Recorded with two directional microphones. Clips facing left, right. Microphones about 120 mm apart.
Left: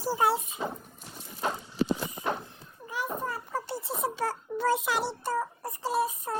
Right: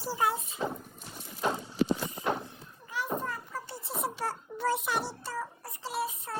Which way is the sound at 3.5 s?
80° left.